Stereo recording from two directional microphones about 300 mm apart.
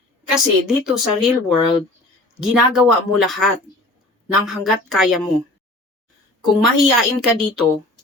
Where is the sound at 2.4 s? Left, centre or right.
Centre.